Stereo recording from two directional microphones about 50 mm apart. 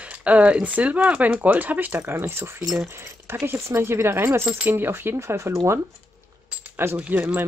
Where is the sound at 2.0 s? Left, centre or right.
Right.